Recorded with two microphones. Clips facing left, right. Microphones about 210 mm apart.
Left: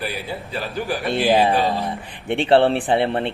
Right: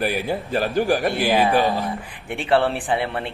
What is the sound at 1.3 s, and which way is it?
Speech, 25° left (ahead or behind).